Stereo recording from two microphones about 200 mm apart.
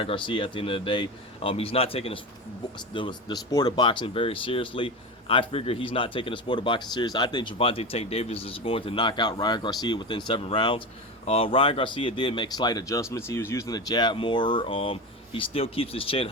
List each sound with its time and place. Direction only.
0.0 s speech: 25° left (ahead or behind)